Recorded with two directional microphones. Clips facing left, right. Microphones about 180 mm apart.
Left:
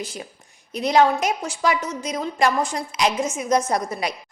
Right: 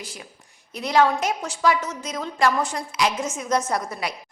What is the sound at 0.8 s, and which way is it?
A woman's voice, 20° left (ahead or behind).